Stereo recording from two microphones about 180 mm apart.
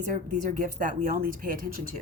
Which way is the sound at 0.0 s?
45° right (ahead or behind).